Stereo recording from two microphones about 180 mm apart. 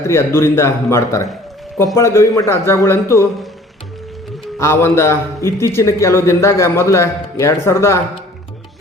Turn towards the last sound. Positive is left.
turn(degrees=15)  # may be behind; listen again after turning